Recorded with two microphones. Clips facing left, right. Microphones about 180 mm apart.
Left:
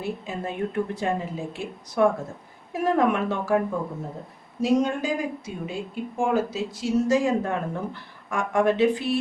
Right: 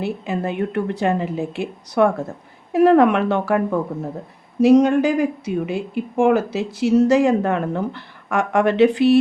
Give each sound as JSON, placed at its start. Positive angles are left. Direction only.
{"t": 0.0, "sound": "speech", "side_deg": -75}